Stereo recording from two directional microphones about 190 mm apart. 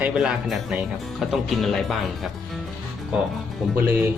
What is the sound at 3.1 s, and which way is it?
Speech, 5° right (ahead or behind).